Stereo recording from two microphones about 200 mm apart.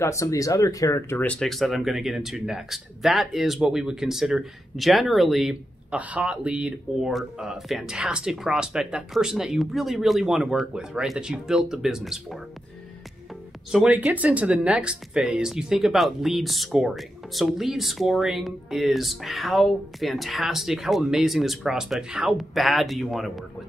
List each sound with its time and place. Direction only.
0.0 s speech: 15° left (ahead or behind); by 12.4 s centre (ahead or behind)
13.7 s speech: 5° right (ahead or behind)